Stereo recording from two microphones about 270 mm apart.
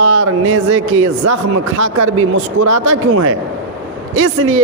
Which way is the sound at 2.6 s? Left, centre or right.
Right.